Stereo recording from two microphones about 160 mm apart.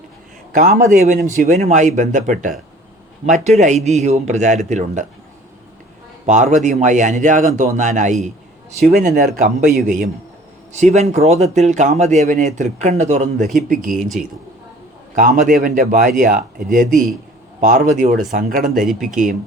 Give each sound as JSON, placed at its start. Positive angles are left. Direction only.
{"t": 0.5, "sound": "speech", "side_deg": -50}
{"t": 6.2, "sound": "speech", "side_deg": -50}
{"t": 8.8, "sound": "speech", "side_deg": -70}
{"t": 13.4, "sound": "speech", "side_deg": 0}
{"t": 15.1, "sound": "a man's voice", "side_deg": -55}
{"t": 18.7, "sound": "speech", "side_deg": 0}
{"t": 19.1, "sound": "speech", "side_deg": -55}